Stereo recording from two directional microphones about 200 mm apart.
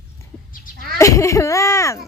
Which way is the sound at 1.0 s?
15° left (ahead or behind).